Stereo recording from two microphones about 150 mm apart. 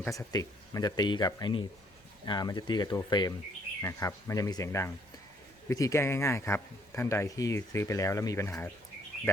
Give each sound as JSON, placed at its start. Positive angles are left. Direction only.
{"t": 0.1, "sound": "speech", "side_deg": 20}